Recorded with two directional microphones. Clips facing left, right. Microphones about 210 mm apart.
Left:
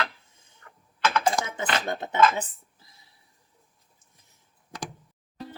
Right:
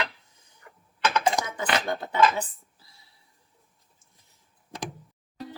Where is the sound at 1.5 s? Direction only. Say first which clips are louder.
Right 1 dB; 25° left (ahead or behind).